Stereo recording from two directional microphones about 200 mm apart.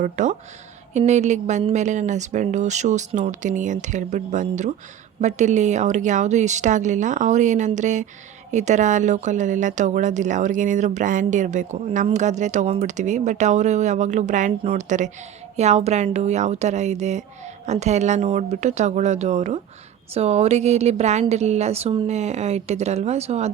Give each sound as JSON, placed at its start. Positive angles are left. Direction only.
{"t": 0.0, "sound": "a woman's voice", "side_deg": -40}